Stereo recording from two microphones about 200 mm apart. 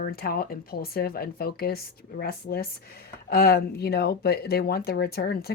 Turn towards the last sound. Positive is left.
turn(degrees=50)  # may be behind; listen again after turning